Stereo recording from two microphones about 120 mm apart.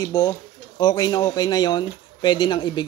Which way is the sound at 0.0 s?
35° left (ahead or behind).